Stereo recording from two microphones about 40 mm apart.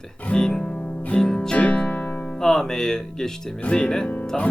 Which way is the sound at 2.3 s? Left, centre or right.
Centre.